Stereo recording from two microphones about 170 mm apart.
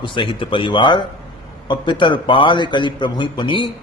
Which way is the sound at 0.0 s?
30° left (ahead or behind).